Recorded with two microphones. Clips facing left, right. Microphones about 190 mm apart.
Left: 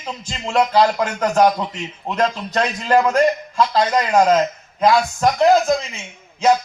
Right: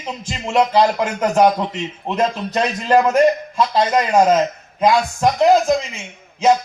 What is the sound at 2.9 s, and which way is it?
A man's voice, 20° right (ahead or behind).